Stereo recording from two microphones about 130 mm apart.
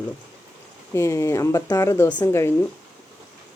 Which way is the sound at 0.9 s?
20° left (ahead or behind).